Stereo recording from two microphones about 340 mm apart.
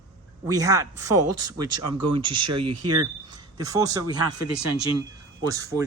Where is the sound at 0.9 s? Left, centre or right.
Right.